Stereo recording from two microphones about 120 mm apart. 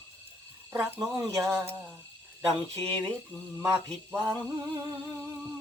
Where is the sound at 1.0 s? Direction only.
30° right (ahead or behind).